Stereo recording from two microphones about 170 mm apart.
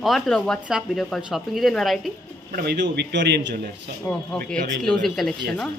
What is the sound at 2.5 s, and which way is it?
A man's voice, 75° right (ahead or behind).